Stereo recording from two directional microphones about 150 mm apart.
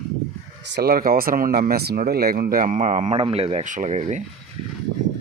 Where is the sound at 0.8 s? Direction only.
75° right (ahead or behind); by 3.6 s 40° right (ahead or behind).